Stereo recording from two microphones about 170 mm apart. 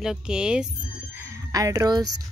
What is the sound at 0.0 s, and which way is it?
Speech, 5° right (ahead or behind).